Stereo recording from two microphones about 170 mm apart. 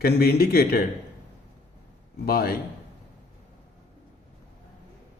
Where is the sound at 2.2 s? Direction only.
65° left (ahead or behind).